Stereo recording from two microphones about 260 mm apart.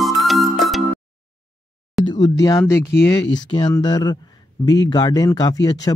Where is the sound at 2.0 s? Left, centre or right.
Centre.